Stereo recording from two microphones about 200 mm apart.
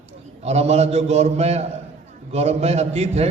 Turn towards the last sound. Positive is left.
turn(degrees=-30)  # may be behind; listen again after turning